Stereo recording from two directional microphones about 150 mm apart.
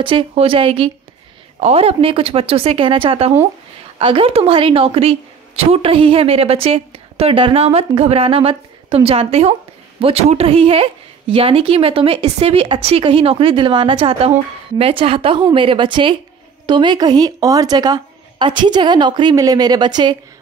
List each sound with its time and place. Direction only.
0.0 s a woman's voice: 35° right (ahead or behind)